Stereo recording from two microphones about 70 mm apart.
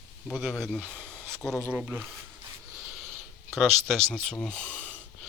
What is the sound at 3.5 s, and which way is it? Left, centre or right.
Speech, centre.